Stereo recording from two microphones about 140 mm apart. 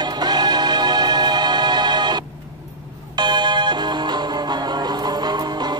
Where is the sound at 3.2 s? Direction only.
30° right (ahead or behind).